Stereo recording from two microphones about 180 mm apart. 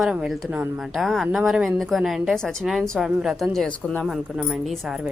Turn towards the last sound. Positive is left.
turn(degrees=0)  # may be behind; listen again after turning